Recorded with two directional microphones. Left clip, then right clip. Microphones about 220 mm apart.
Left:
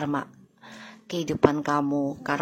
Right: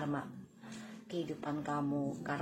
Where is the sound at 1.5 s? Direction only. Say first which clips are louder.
Left 13 dB; 35° left (ahead or behind).